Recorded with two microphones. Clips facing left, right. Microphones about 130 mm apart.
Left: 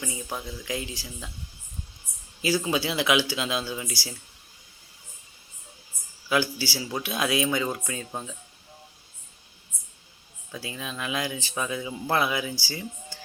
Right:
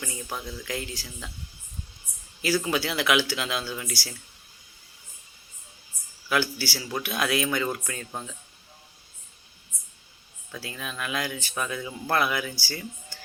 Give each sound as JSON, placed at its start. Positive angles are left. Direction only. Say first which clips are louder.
{"t": 0.0, "sound": "speech", "louder": "left 1 dB", "side_deg": 15}
{"t": 2.4, "sound": "speech", "louder": "even", "side_deg": 20}
{"t": 6.2, "sound": "speech", "louder": "left 1 dB", "side_deg": 20}
{"t": 10.5, "sound": "speech", "louder": "left 1 dB", "side_deg": 20}